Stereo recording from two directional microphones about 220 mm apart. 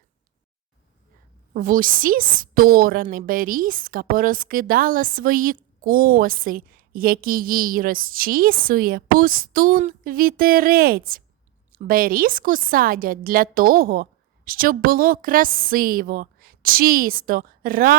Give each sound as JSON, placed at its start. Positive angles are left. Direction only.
{"t": 1.5, "sound": "a woman's voice", "side_deg": -40}